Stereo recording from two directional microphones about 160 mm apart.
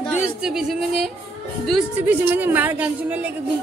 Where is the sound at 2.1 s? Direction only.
10° right (ahead or behind).